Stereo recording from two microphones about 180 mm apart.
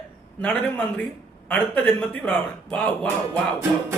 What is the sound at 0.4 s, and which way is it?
A man's voice, 10° left (ahead or behind).